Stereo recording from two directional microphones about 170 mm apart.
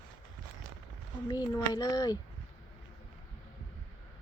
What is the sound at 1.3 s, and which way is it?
Speech, 20° left (ahead or behind).